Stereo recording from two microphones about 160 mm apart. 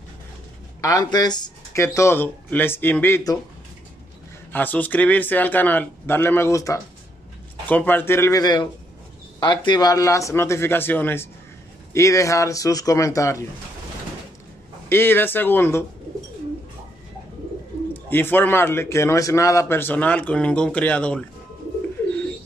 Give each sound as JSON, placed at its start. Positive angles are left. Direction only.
{"t": 0.7, "sound": "speech", "side_deg": 20}
{"t": 4.5, "sound": "speech", "side_deg": 10}
{"t": 14.9, "sound": "speech", "side_deg": 15}
{"t": 18.1, "sound": "speech", "side_deg": 10}